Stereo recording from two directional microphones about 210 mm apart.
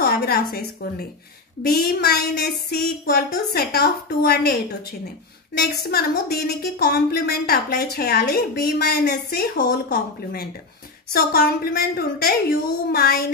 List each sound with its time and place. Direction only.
0.0 s a woman's voice: 45° left (ahead or behind)
5.8 s a woman's voice: 45° left (ahead or behind)